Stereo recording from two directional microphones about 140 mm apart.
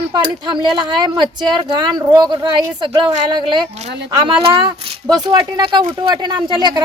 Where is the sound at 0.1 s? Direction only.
35° right (ahead or behind).